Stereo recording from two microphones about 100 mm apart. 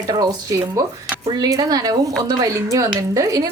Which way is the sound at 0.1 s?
35° right (ahead or behind).